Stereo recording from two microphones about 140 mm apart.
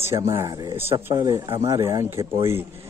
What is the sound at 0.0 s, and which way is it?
Speech, 20° right (ahead or behind).